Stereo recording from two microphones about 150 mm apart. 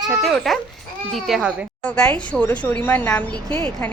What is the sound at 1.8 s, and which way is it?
A woman's voice, 5° left (ahead or behind).